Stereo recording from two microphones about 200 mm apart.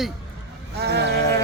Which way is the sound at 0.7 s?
55° right (ahead or behind).